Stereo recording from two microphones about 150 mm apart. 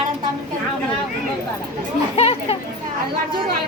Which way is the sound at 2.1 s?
40° left (ahead or behind).